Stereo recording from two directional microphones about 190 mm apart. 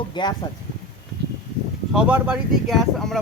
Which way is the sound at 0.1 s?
25° left (ahead or behind).